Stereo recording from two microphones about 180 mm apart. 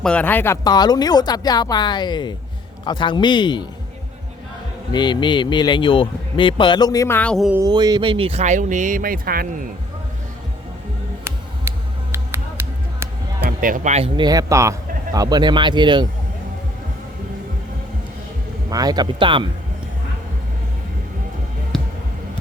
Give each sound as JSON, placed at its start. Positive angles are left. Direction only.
{"t": 0.0, "sound": "a man's voice", "side_deg": 5}
{"t": 4.9, "sound": "a man's voice", "side_deg": 25}
{"t": 7.5, "sound": "speech", "side_deg": -20}
{"t": 11.2, "sound": "music", "side_deg": -15}
{"t": 13.6, "sound": "speech", "side_deg": -50}
{"t": 14.3, "sound": "a man's voice", "side_deg": -20}
{"t": 18.7, "sound": "a man's voice", "side_deg": -20}
{"t": 21.7, "sound": "a sound", "side_deg": 5}